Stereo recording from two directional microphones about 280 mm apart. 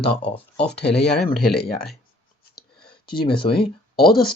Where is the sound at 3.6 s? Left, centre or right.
Left.